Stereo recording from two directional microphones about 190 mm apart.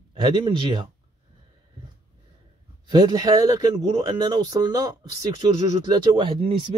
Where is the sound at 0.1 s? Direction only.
25° right (ahead or behind).